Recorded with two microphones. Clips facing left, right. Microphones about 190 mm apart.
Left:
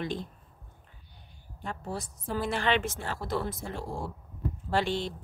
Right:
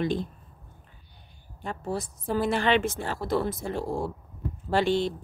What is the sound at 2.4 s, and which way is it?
Speech, 10° right (ahead or behind).